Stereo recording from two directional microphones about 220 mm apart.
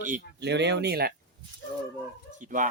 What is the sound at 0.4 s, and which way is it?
Speech, 50° right (ahead or behind).